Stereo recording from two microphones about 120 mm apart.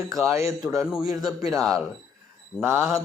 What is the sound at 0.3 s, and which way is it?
Mantra, 25° right (ahead or behind).